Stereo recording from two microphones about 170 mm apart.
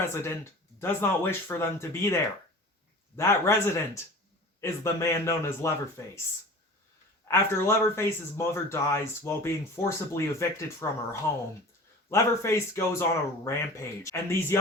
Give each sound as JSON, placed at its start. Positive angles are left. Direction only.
{"t": 0.0, "sound": "speech", "side_deg": 15}
{"t": 3.2, "sound": "speech", "side_deg": 15}
{"t": 7.3, "sound": "speech", "side_deg": 15}